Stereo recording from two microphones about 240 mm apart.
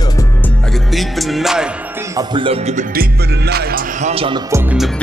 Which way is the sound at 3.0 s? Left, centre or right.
Right.